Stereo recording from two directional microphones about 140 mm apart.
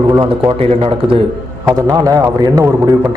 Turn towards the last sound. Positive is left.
turn(degrees=-25)  # may be behind; listen again after turning